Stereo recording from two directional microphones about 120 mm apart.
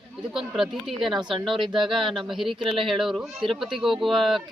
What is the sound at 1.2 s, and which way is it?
Speech, 40° right (ahead or behind).